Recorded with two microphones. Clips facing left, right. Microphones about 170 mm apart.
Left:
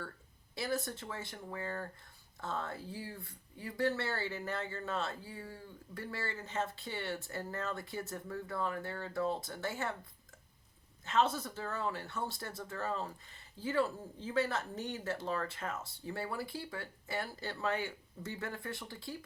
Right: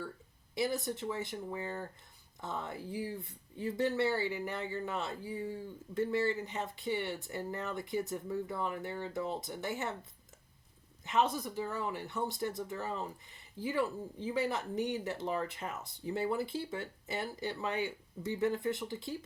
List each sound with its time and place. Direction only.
0.5 s speech: 20° right (ahead or behind)
11.0 s speech: 15° right (ahead or behind)